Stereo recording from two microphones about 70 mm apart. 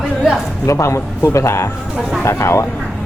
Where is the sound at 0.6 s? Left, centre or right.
Left.